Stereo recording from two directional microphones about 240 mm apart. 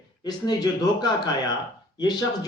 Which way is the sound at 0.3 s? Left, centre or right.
Centre.